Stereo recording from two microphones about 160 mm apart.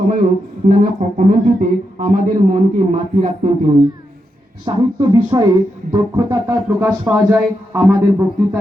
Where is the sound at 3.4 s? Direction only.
40° right (ahead or behind).